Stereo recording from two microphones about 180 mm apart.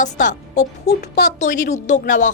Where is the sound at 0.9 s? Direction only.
65° left (ahead or behind).